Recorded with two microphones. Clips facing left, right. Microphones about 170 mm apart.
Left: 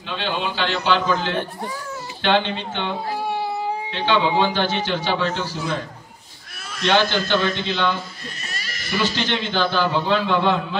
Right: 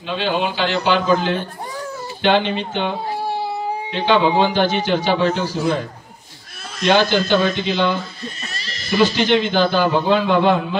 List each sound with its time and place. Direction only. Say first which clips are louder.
0.2 s a man's voice: right 4 dB; 15° right (ahead or behind)
3.9 s a man's voice: right 4 dB; 15° right (ahead or behind)
6.8 s a man's voice: right 4 dB; 15° right (ahead or behind)
8.5 s bleat: right 1 dB; 30° right (ahead or behind)
9.1 s a man's voice: right 7 dB; 15° right (ahead or behind)